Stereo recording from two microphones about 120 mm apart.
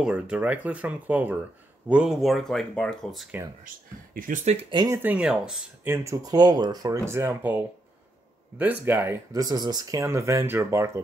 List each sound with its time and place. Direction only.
0.0 s speech: 10° right (ahead or behind)
4.5 s speech: 70° right (ahead or behind)
4.8 s speech: 25° right (ahead or behind)
5.1 s speech: 5° right (ahead or behind)
5.9 s speech: 30° right (ahead or behind)
9.3 s speech: 30° right (ahead or behind)